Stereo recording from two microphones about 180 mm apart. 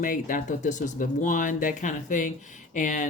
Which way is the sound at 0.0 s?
50° left (ahead or behind).